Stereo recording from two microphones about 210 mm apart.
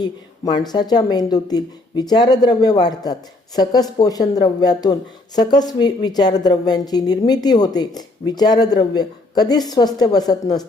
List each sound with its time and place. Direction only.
0.0 s a woman's voice: 20° left (ahead or behind)